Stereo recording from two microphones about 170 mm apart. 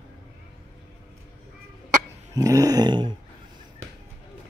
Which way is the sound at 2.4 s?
20° right (ahead or behind).